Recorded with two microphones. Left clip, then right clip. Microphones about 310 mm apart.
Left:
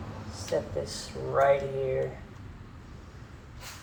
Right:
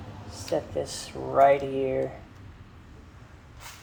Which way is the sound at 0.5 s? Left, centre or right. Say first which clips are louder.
Right 2 dB; right.